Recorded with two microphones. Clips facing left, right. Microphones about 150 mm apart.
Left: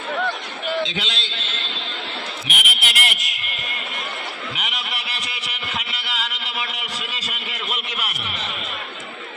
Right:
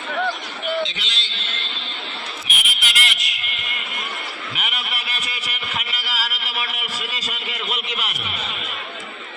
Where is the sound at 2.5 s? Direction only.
70° left (ahead or behind); by 3.6 s 50° left (ahead or behind).